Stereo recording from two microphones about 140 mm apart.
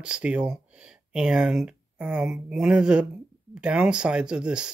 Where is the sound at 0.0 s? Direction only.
10° right (ahead or behind).